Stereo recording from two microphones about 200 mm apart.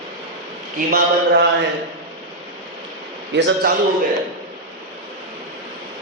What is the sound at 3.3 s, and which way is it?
Speech, 65° right (ahead or behind).